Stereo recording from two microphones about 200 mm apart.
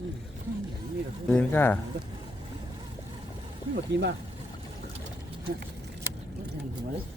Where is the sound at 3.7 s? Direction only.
55° right (ahead or behind).